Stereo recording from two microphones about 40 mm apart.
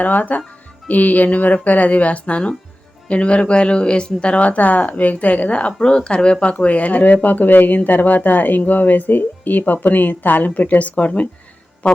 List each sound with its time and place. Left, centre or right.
0.0 s speech: left